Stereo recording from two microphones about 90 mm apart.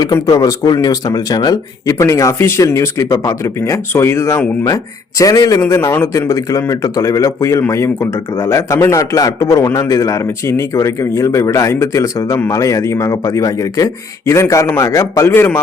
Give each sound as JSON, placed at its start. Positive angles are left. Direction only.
{"t": 0.0, "sound": "speech", "side_deg": 40}
{"t": 2.0, "sound": "speech", "side_deg": 35}
{"t": 15.3, "sound": "a man's voice", "side_deg": 25}